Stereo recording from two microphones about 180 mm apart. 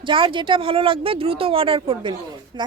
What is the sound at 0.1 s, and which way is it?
Speech, 30° right (ahead or behind).